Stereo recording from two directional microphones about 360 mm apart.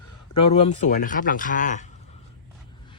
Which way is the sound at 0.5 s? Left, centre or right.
Centre.